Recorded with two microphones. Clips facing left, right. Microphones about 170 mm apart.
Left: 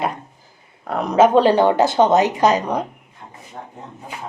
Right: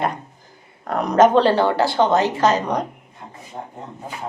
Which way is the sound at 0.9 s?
5° left (ahead or behind).